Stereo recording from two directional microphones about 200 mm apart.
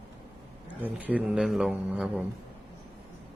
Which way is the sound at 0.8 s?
10° right (ahead or behind).